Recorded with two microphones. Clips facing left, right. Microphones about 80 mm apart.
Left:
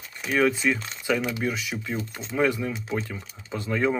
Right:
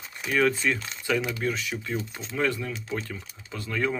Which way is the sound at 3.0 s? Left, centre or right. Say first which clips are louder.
Left 2 dB; centre.